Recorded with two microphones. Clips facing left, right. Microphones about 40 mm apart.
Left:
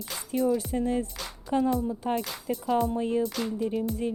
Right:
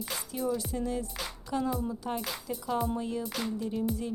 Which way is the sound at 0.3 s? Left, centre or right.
Centre.